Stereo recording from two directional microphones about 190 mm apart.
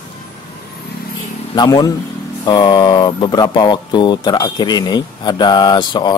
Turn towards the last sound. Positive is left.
turn(degrees=25)  # may be behind; listen again after turning